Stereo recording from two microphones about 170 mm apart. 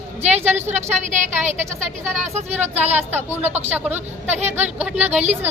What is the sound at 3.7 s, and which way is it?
Speech, 10° right (ahead or behind).